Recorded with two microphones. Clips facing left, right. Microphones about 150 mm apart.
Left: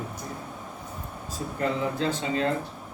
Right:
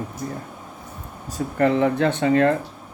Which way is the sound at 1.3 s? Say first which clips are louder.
Right 9 dB; 70° right (ahead or behind).